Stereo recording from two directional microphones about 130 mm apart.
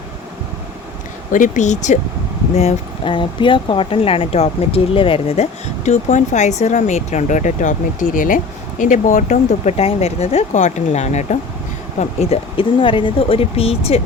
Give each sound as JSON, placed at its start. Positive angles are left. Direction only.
{"t": 1.3, "sound": "speech", "side_deg": 80}
{"t": 3.0, "sound": "speech", "side_deg": 40}
{"t": 8.8, "sound": "speech", "side_deg": 80}
{"t": 11.9, "sound": "speech", "side_deg": 55}